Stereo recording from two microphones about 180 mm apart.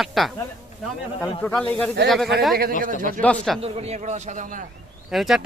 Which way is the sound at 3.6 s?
35° right (ahead or behind).